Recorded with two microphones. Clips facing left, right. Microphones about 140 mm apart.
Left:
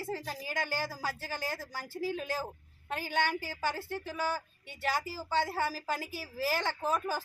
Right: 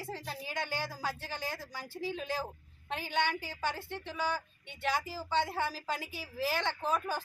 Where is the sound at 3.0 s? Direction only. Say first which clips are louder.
Left 1 dB; 45° left (ahead or behind).